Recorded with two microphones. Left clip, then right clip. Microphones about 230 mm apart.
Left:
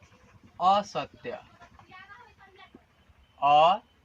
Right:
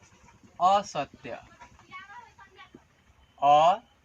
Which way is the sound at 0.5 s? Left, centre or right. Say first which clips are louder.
Right 1 dB; right.